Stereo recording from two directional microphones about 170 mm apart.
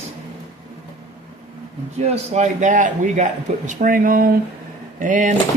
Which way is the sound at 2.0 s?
40° right (ahead or behind).